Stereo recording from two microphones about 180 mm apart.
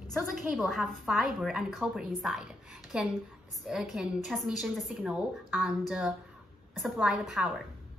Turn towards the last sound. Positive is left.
turn(degrees=0)  # may be behind; listen again after turning